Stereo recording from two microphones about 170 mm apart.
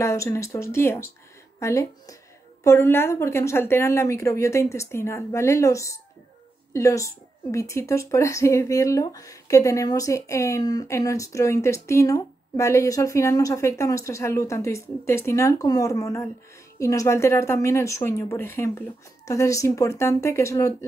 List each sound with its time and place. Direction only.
0.0 s speech: 15° left (ahead or behind)